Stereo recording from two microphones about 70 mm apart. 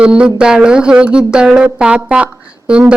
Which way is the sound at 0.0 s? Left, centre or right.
Centre.